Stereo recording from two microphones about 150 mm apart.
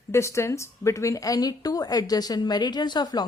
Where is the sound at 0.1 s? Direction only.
20° left (ahead or behind).